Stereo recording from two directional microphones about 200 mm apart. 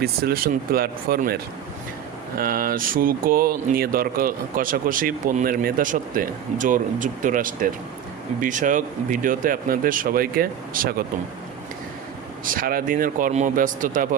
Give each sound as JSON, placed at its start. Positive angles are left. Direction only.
{"t": 0.0, "sound": "speech", "side_deg": -50}
{"t": 12.5, "sound": "speech", "side_deg": -45}